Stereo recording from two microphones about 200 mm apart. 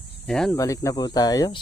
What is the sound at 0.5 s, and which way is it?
Speech, 15° left (ahead or behind).